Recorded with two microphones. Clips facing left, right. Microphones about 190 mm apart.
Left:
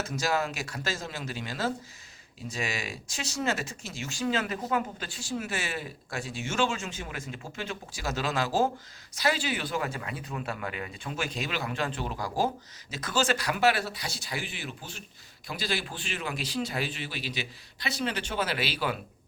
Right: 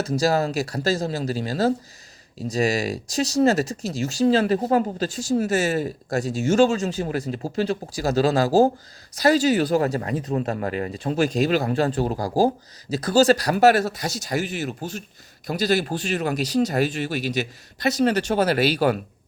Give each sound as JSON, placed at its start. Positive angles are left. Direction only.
{"t": 0.0, "sound": "speech", "side_deg": -35}